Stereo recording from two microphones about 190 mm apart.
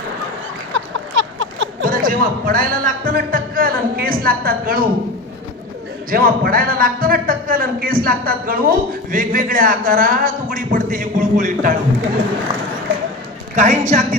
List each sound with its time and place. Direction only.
0.7 s a sound: 85° right
1.8 s a man's voice: 45° right (ahead or behind)
6.1 s a man's voice: 50° right (ahead or behind)
13.6 s a man's voice: 40° right (ahead or behind)